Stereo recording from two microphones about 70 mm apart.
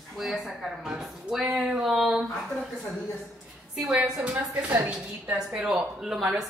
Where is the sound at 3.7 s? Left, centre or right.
Centre.